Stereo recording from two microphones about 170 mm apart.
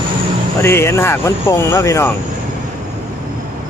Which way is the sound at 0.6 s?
15° left (ahead or behind).